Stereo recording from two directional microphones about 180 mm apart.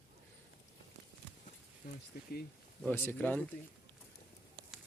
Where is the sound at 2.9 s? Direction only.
10° left (ahead or behind).